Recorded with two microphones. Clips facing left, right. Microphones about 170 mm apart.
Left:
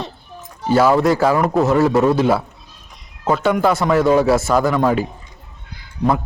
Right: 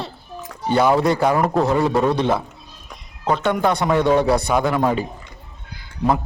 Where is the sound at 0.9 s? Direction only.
Centre (ahead or behind).